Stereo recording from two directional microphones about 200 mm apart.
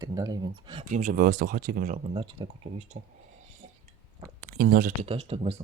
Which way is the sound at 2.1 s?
30° right (ahead or behind).